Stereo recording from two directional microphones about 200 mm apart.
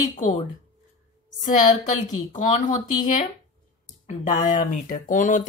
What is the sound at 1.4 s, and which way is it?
Speech, 40° left (ahead or behind).